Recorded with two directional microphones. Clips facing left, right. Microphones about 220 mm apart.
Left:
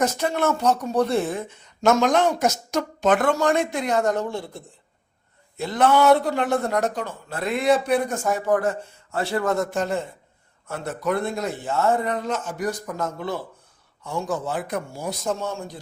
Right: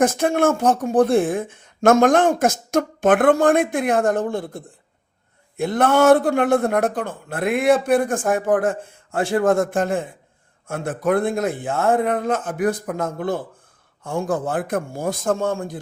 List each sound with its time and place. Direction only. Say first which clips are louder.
0.0 s speech: right 5 dB; 50° right (ahead or behind)